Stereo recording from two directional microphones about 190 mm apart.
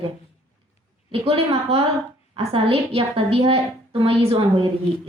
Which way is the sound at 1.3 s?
30° right (ahead or behind).